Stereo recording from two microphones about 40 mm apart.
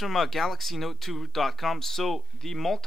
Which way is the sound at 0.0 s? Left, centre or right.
Centre.